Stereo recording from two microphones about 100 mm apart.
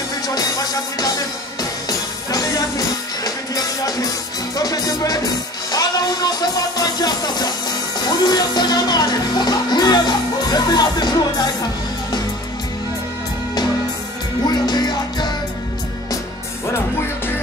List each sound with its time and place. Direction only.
0.3 s music: 40° left (ahead or behind)
14.4 s music: 45° left (ahead or behind)